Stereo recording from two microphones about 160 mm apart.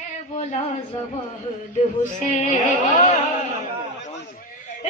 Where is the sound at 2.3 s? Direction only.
50° left (ahead or behind).